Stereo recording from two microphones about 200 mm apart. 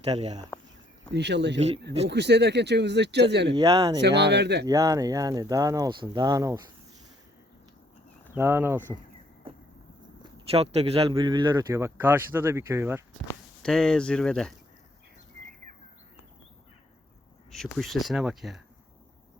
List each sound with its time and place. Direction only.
0.0 s speech: 30° right (ahead or behind)
1.1 s speech: 60° right (ahead or behind)
3.6 s speech: 15° right (ahead or behind)
4.0 s speech: 60° right (ahead or behind)
4.6 s speech: 15° right (ahead or behind)
8.4 s speech: 10° right (ahead or behind)
10.3 s speech: 30° right (ahead or behind); by 13.0 s 15° right (ahead or behind)
13.6 s speech: 5° left (ahead or behind)
17.5 s speech: centre (ahead or behind)